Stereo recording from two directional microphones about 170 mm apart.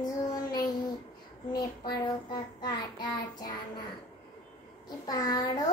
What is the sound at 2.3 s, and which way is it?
Child singing, 25° left (ahead or behind).